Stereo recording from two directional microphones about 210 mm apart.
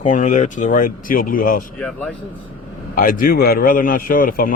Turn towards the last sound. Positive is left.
turn(degrees=40)  # may be behind; listen again after turning